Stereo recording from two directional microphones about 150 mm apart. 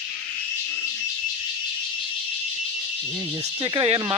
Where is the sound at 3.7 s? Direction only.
40° right (ahead or behind).